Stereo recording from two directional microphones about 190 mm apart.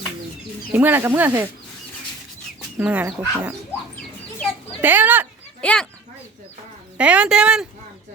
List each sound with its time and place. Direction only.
0.7 s speech: 10° right (ahead or behind)
2.7 s speech: 10° right (ahead or behind)
4.8 s speech: 10° right (ahead or behind)
5.6 s speech: 5° left (ahead or behind)
6.9 s speech: 5° right (ahead or behind)